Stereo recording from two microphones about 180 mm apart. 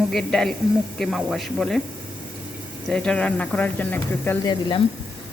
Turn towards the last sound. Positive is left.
turn(degrees=25)  # may be behind; listen again after turning